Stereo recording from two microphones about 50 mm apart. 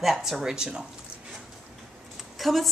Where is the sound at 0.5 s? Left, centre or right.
Centre.